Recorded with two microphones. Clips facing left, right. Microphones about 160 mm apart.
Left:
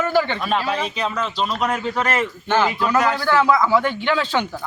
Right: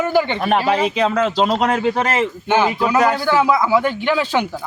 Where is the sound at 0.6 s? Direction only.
80° right.